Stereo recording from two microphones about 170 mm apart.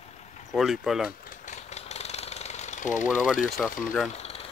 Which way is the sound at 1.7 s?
40° left (ahead or behind).